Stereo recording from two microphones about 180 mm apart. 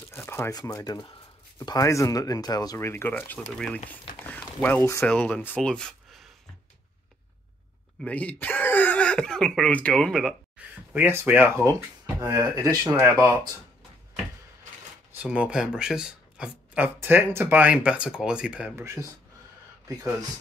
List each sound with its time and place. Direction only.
0.1 s speech: 15° left (ahead or behind)
8.0 s speech: 10° left (ahead or behind)
10.9 s speech: 10° right (ahead or behind)
15.2 s speech: 5° right (ahead or behind)